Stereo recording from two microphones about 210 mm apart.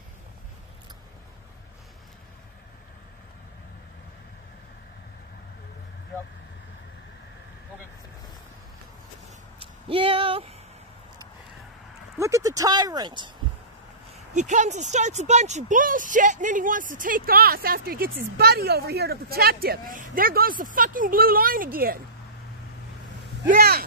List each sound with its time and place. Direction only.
9.6 s a sound: 25° right (ahead or behind)
12.2 s speech: 15° right (ahead or behind)
14.1 s speech: 35° right (ahead or behind)
23.5 s speech: 45° right (ahead or behind)